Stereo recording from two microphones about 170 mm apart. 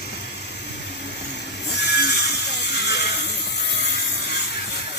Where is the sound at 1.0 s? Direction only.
85° left.